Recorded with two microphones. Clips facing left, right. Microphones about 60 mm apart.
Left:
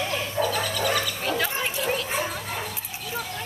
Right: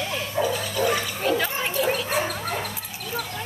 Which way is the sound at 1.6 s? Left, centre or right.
Centre.